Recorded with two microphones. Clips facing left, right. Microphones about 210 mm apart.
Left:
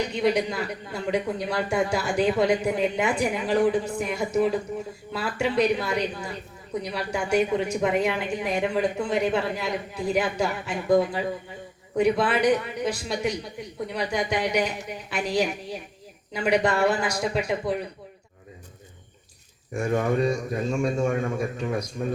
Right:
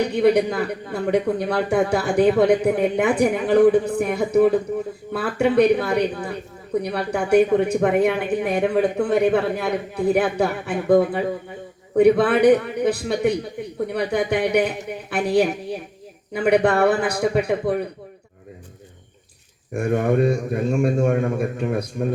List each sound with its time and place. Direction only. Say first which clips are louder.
0.0 s speech: right 6 dB; 60° right (ahead or behind)
19.7 s speech: right 4 dB; 60° right (ahead or behind)